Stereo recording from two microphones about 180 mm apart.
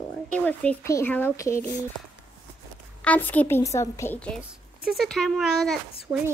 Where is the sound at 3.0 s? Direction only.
10° left (ahead or behind).